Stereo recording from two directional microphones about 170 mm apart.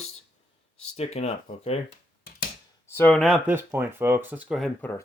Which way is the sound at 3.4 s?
10° right (ahead or behind).